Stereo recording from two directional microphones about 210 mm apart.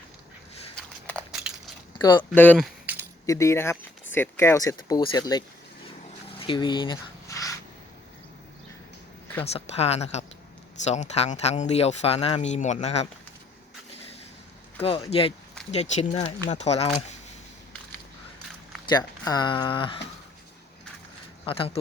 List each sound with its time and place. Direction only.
1.0 s crushing: centre (ahead or behind)
2.0 s speech: 20° left (ahead or behind)
2.3 s speech: 10° left (ahead or behind)
2.9 s keys jangling: 10° right (ahead or behind)
3.2 s speech: 15° left (ahead or behind)
6.4 s a sound: 25° left (ahead or behind)
9.4 s speech: 30° left (ahead or behind)
14.8 s speech: 25° left (ahead or behind)
18.9 s speech: 20° left (ahead or behind)
21.4 s speech: 25° left (ahead or behind)